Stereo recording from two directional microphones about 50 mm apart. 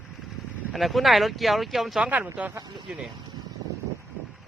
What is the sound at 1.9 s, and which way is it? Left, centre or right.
Speech, right.